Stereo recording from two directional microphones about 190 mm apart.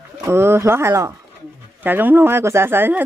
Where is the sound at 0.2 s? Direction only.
15° right (ahead or behind).